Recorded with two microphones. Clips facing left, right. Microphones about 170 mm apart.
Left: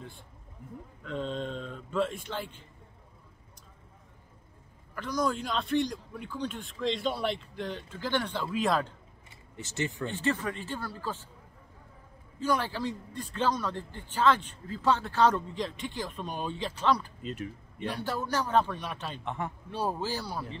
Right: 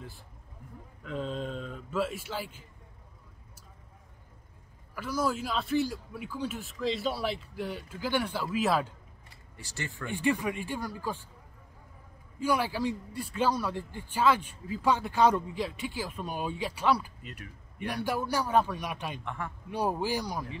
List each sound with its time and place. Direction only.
1.0 s a man's voice: 5° right (ahead or behind)
4.9 s a man's voice: 5° right (ahead or behind)
9.6 s speech: 20° left (ahead or behind)
10.0 s a man's voice: 15° right (ahead or behind)
12.4 s a man's voice: 10° right (ahead or behind)
17.2 s speech: 25° left (ahead or behind)
17.7 s a man's voice: 15° right (ahead or behind)
19.2 s speech: 20° left (ahead or behind)
19.7 s a man's voice: 15° right (ahead or behind)